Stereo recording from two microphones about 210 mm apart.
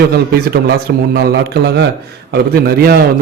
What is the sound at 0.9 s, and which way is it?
Speech, 50° right (ahead or behind).